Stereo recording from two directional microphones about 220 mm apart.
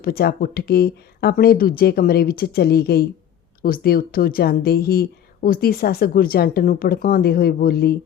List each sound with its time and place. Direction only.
0.0 s speech: 45° left (ahead or behind)